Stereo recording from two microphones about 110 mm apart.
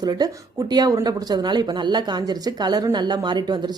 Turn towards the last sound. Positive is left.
turn(degrees=-40)  # may be behind; listen again after turning